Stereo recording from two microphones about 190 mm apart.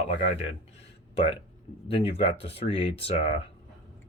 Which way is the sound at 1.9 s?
30° left (ahead or behind).